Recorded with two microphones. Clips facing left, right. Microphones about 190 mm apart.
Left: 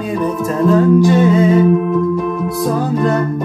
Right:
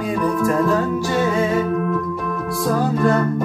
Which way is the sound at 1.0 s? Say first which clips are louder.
Left 8 dB; 20° left (ahead or behind).